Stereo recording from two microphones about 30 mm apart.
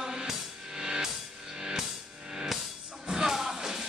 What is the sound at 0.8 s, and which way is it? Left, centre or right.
Music, centre.